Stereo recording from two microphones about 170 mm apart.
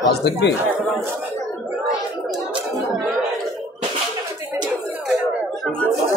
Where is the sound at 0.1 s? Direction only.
80° left.